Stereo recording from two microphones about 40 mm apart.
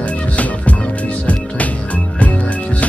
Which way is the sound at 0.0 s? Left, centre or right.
Left.